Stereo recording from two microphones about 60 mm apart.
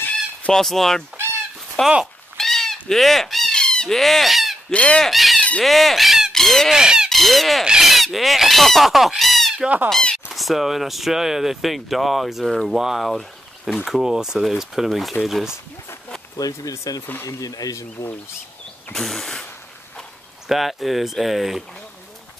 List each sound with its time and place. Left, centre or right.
0.5 s speech: centre
2.3 s chicken: centre
3.5 s fowl: centre
4.6 s speech: centre
5.0 s speech: centre
5.6 s fowl: centre
6.3 s speech: centre
6.7 s speech: centre
7.1 s speech: centre
16.3 s speech: left
17.0 s speech: left
17.3 s speech: left
18.9 s speech: centre
20.4 s speech: centre